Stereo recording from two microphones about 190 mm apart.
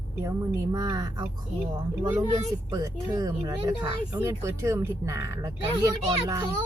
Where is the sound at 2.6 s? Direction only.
20° right (ahead or behind).